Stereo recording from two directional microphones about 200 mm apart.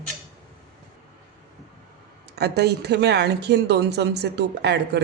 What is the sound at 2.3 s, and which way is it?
Speech, 55° right (ahead or behind).